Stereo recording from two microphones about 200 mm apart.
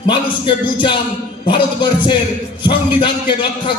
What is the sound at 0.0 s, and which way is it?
A man's voice, 25° left (ahead or behind).